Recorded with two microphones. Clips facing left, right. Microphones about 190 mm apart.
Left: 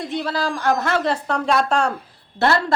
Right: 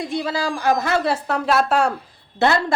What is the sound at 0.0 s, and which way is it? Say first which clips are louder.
A woman's voice: even; 10° right (ahead or behind).